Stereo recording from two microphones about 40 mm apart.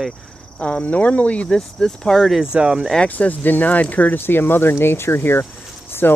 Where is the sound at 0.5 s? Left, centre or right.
Left.